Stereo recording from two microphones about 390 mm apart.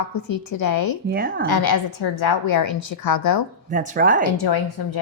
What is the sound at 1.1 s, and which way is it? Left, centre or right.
Speech, right.